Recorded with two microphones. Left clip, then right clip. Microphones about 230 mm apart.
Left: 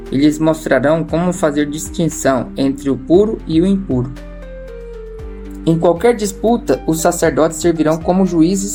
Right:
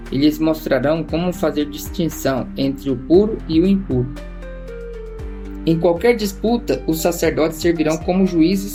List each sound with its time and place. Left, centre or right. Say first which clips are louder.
0.1 s speech: left 3 dB; left
3.9 s speech: left 2 dB; centre
5.6 s speech: left 3 dB; left